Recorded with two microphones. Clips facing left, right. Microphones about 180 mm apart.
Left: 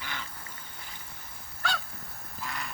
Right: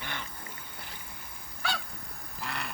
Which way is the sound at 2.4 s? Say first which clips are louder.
Right 1 dB; 65° right (ahead or behind).